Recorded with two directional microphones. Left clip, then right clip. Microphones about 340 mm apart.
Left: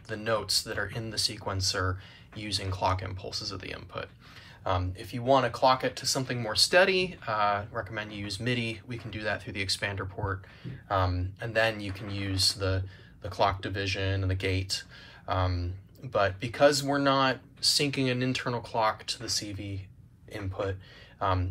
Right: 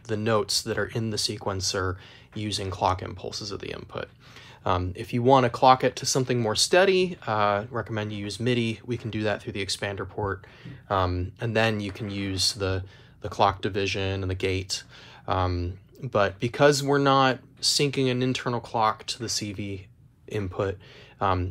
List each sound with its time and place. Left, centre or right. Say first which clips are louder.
0.1 s speech: right 4 dB; centre
5.3 s speech: right 5 dB; centre
21.2 s speech: right 4 dB; centre